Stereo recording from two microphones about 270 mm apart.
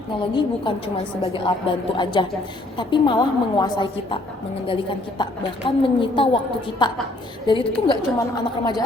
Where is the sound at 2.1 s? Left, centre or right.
Centre.